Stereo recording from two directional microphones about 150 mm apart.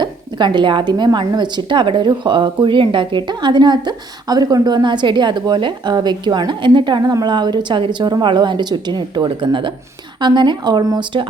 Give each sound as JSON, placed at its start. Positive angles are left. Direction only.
{"t": 0.0, "sound": "speech", "side_deg": -30}